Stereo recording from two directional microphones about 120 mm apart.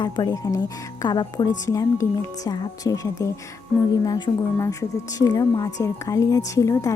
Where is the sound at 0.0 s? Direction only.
35° left (ahead or behind).